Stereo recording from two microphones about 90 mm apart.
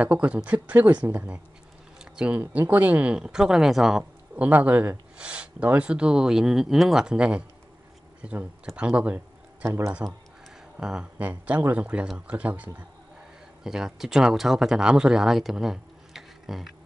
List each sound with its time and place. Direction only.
0.0 s speech: 15° right (ahead or behind)
4.4 s speech: 15° right (ahead or behind)
9.7 s speech: 30° right (ahead or behind)
10.8 s speech: 10° right (ahead or behind)
13.7 s speech: 5° right (ahead or behind)